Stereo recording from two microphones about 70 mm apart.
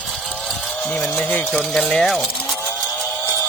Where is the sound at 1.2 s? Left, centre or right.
Left.